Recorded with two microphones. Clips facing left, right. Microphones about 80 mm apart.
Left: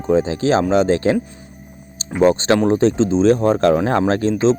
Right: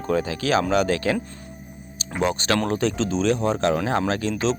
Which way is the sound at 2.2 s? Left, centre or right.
Left.